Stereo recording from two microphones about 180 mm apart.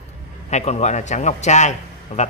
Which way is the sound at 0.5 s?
40° left (ahead or behind).